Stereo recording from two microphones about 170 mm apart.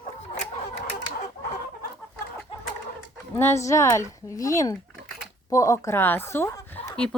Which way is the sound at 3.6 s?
15° left (ahead or behind).